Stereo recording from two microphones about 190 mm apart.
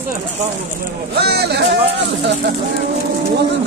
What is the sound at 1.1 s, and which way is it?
Speech, 60° right (ahead or behind).